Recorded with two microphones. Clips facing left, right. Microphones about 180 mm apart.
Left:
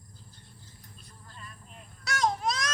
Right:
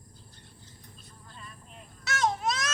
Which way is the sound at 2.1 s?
Centre (ahead or behind).